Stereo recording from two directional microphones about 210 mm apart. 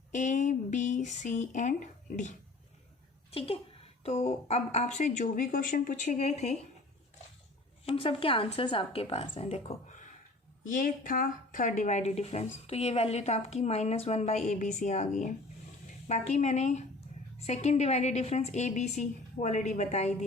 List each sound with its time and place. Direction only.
0.1 s a woman's voice: 35° left (ahead or behind)
3.3 s a woman's voice: 25° left (ahead or behind)
7.9 s a woman's voice: 25° left (ahead or behind)